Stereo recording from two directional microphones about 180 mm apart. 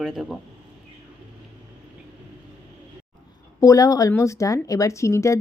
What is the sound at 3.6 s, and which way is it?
Speech, 20° left (ahead or behind).